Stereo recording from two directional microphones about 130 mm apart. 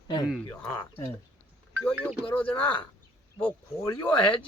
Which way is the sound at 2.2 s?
10° left (ahead or behind).